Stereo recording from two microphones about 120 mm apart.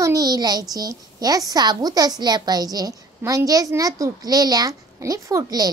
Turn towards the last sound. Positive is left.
turn(degrees=-30)  # may be behind; listen again after turning